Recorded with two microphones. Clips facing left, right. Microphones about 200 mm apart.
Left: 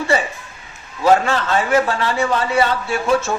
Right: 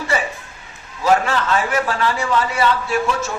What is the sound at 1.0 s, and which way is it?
A man's voice, 25° left (ahead or behind).